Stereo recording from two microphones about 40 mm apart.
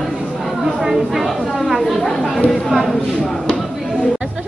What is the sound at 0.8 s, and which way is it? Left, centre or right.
Speech, centre.